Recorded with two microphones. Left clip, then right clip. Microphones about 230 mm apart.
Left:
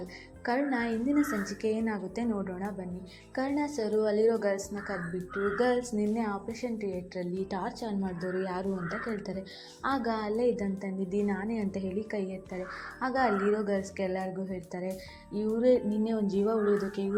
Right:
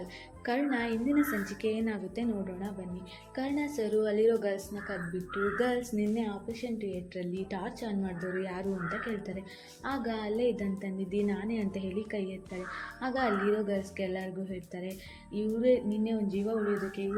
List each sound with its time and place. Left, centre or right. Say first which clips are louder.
0.4 s a woman's voice: left 1 dB; centre
7.2 s a woman's voice: left 3 dB; centre